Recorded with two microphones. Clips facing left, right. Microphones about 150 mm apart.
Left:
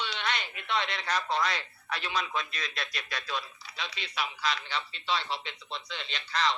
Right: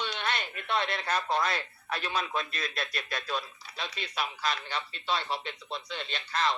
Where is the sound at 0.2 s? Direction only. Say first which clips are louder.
Left 1 dB; 50° right (ahead or behind).